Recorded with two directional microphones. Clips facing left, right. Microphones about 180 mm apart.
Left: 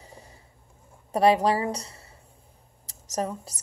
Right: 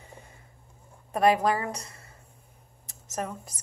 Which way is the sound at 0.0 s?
35° left (ahead or behind).